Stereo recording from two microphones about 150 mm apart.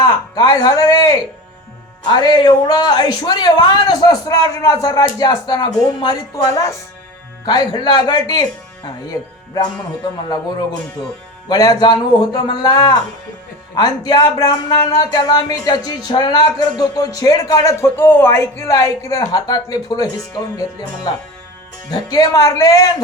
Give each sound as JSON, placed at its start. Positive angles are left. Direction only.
{"t": 0.0, "sound": "speech", "side_deg": 25}
{"t": 7.4, "sound": "speech", "side_deg": 30}
{"t": 11.4, "sound": "speech", "side_deg": 25}
{"t": 21.8, "sound": "speech", "side_deg": 25}